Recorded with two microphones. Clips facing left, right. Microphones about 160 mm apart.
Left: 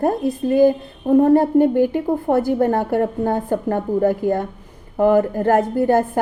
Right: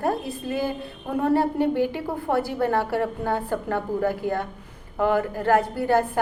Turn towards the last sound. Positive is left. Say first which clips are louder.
# left 5 dB
turn(degrees=45)  # may be behind; listen again after turning